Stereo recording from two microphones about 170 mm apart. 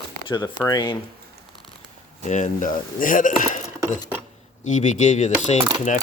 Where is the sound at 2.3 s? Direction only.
50° left (ahead or behind).